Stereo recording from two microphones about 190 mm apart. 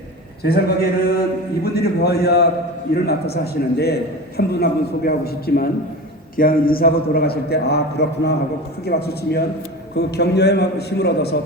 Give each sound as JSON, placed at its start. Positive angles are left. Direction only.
{"t": 0.4, "sound": "a man's voice", "side_deg": 55}